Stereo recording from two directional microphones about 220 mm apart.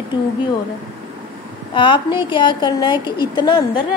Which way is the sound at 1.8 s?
20° left (ahead or behind).